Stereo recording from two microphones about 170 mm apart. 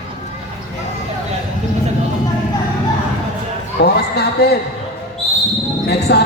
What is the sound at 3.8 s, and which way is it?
Speech, 70° left (ahead or behind).